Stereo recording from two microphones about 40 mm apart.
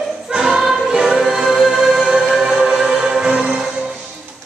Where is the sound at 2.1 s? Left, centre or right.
Centre.